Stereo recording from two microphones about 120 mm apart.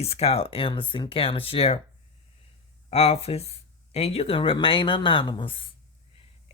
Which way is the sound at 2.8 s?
60° left (ahead or behind).